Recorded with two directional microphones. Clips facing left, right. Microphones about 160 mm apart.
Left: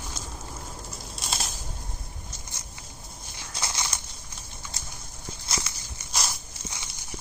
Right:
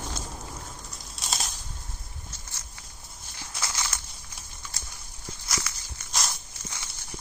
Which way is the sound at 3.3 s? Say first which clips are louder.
Left 1 dB; 20° left (ahead or behind).